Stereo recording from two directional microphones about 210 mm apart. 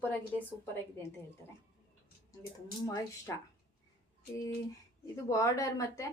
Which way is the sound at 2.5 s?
15° left (ahead or behind).